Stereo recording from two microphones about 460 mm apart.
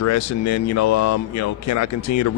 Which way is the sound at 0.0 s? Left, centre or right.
Left.